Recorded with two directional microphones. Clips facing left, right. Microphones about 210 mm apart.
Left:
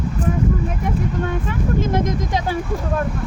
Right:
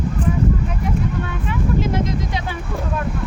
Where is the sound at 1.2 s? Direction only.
45° left (ahead or behind).